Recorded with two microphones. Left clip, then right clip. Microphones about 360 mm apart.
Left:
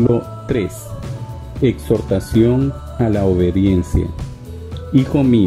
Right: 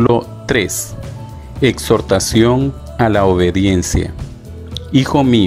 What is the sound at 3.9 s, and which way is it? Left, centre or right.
Speech, right.